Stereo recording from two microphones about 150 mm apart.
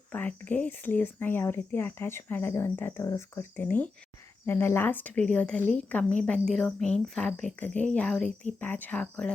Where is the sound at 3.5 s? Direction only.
10° left (ahead or behind).